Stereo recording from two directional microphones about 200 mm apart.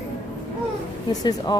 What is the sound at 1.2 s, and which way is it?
Speech, 20° left (ahead or behind).